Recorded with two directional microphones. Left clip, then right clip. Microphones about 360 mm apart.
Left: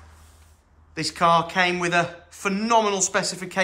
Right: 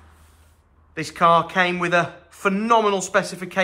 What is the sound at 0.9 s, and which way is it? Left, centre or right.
A man's voice, centre.